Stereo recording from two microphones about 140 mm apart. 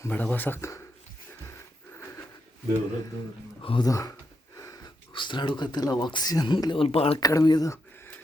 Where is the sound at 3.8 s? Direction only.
25° left (ahead or behind); by 7.1 s 45° left (ahead or behind).